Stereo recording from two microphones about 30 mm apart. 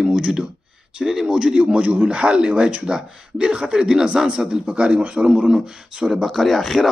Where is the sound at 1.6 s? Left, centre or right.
Right.